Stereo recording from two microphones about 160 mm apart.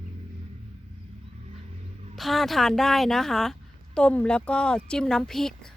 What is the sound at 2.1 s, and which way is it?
A woman's voice, centre (ahead or behind).